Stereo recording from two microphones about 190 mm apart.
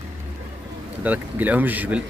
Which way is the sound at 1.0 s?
10° right (ahead or behind).